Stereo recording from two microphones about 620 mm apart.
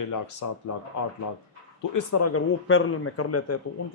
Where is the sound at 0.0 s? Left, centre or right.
Left.